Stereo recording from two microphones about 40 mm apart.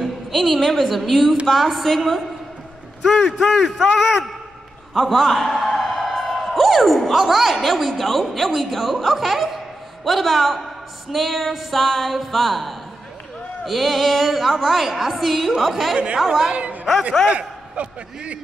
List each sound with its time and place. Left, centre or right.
0.0 s a woman's voice: centre
5.8 s music: centre
6.3 s a woman's voice: centre
17.3 s a man's voice: right